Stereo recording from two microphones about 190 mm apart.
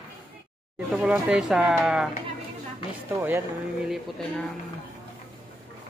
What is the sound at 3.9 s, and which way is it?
Speech, centre (ahead or behind).